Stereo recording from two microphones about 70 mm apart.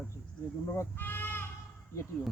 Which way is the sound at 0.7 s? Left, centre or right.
Left.